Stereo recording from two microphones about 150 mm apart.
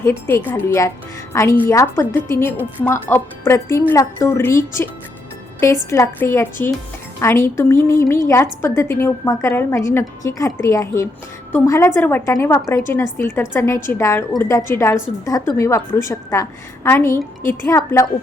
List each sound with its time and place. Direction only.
0.0 s a woman's voice: 15° left (ahead or behind)